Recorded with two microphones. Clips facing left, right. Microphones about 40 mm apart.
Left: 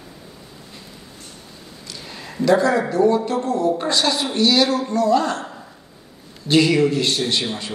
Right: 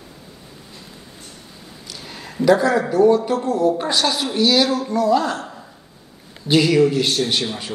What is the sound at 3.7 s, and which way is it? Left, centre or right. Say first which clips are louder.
Speech: even; centre.